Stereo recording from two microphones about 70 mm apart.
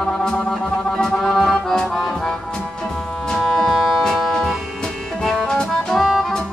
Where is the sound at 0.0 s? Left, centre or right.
Centre.